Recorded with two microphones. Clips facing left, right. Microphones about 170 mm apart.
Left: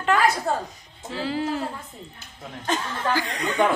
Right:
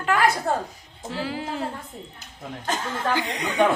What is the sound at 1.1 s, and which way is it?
Speech, 10° right (ahead or behind).